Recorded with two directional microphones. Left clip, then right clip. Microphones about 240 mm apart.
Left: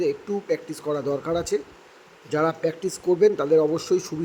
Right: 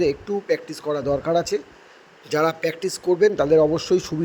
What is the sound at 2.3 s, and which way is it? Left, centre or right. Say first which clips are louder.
A man's voice: right 2 dB; right.